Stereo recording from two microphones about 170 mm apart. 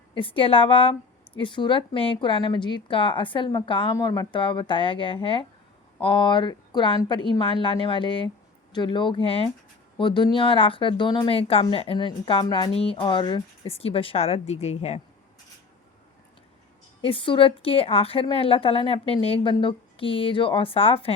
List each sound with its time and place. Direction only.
0.1 s a woman's voice: 30° left (ahead or behind)
17.0 s speech: 30° left (ahead or behind)